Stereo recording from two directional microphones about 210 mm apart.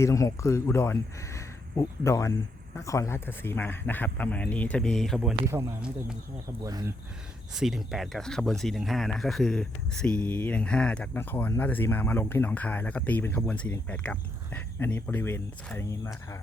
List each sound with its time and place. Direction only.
0.0 s speech: 15° left (ahead or behind); by 6.9 s 15° right (ahead or behind)
7.5 s speech: centre (ahead or behind); by 16.4 s 15° left (ahead or behind)